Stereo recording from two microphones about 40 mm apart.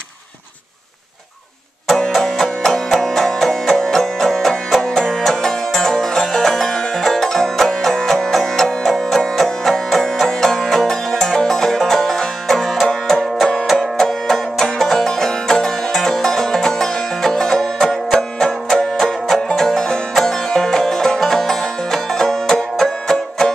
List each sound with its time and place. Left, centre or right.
2.0 s music: centre
18.9 s music: centre